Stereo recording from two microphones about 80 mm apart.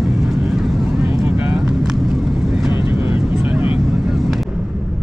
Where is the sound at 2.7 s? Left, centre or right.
Right.